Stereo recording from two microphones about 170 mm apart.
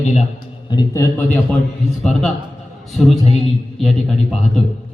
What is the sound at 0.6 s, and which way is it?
Speech, 20° left (ahead or behind).